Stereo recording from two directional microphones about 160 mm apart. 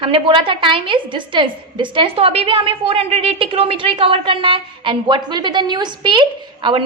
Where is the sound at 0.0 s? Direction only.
35° right (ahead or behind).